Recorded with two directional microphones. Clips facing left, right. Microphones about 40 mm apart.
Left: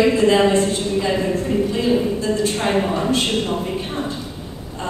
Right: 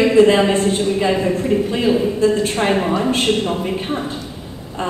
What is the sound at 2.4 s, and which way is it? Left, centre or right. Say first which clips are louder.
Speech: right 2 dB; right.